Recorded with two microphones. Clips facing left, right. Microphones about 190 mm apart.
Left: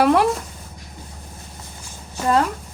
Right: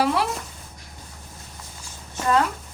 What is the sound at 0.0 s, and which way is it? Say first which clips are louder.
Speech: left 6 dB; 55° left (ahead or behind).